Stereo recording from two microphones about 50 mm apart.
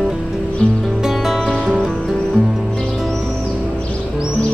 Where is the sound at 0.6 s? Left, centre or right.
Left.